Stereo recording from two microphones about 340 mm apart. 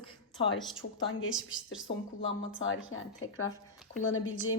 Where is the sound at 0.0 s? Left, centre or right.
Centre.